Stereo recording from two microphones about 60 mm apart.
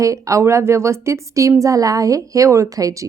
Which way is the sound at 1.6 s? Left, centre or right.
Right.